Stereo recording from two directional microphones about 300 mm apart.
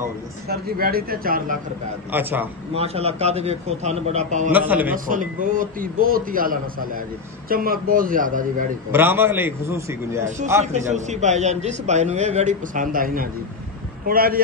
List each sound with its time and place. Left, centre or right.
0.5 s a man's voice: right
2.1 s a man's voice: centre
2.7 s a man's voice: centre
4.5 s a man's voice: centre
4.9 s a man's voice: right
8.9 s a man's voice: centre
10.9 s a man's voice: right